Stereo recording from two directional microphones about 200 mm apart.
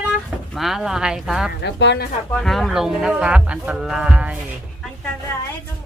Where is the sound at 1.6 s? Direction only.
60° left (ahead or behind).